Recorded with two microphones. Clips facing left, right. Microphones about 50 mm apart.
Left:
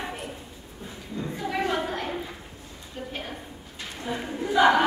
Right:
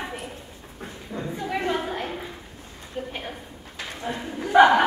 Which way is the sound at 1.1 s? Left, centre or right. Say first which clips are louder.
Right 1 dB; right.